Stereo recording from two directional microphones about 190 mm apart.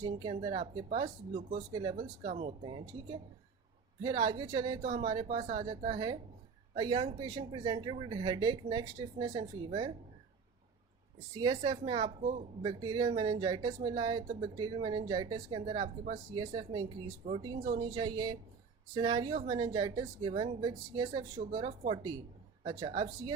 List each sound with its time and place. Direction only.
0.0 s speech: 25° right (ahead or behind)
1.7 s speech: 25° right (ahead or behind)
2.0 s speech: 35° right (ahead or behind)
4.9 s speech: 30° right (ahead or behind)
11.3 s a woman's voice: 25° right (ahead or behind)